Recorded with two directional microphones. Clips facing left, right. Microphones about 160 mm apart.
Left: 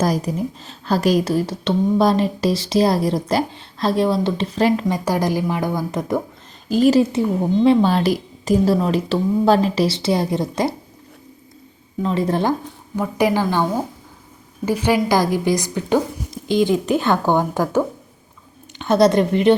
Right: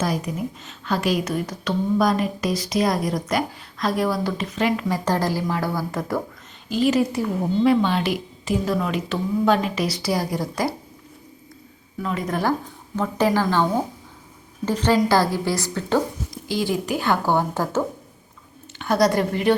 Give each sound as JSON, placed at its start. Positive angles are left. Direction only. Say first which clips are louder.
{"t": 0.0, "sound": "a woman's voice", "louder": "left 5 dB", "side_deg": 35}
{"t": 4.9, "sound": "speech", "louder": "left 3 dB", "side_deg": 15}
{"t": 6.7, "sound": "a woman's voice", "louder": "left 5 dB", "side_deg": 40}
{"t": 7.1, "sound": "a woman's voice", "louder": "left 5 dB", "side_deg": 25}
{"t": 7.9, "sound": "a woman's voice", "louder": "left 5 dB", "side_deg": 40}
{"t": 11.9, "sound": "a woman's voice", "louder": "left 6 dB", "side_deg": 30}
{"t": 13.0, "sound": "a woman's voice", "louder": "left 2 dB", "side_deg": 15}